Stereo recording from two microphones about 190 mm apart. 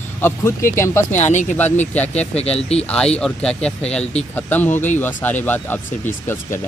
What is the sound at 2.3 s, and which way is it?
Speech, 30° left (ahead or behind).